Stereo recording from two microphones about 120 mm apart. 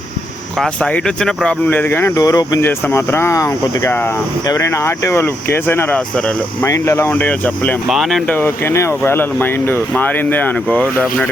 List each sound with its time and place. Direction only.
0.6 s speech: 10° left (ahead or behind)
2.2 s speech: 30° left (ahead or behind)
2.6 s speech: 20° left (ahead or behind)
6.7 s speech: 25° left (ahead or behind)
7.9 s speech: centre (ahead or behind)
8.3 s speech: 20° left (ahead or behind)